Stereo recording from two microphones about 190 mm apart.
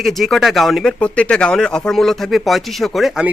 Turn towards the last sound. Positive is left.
turn(degrees=0)  # may be behind; listen again after turning